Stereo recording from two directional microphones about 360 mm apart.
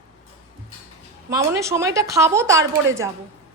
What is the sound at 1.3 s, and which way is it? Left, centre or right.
A woman's voice, centre.